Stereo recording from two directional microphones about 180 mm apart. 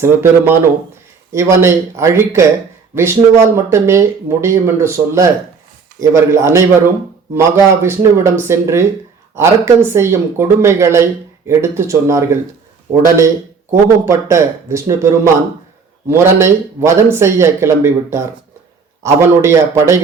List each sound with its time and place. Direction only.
0.0 s speech: 15° right (ahead or behind)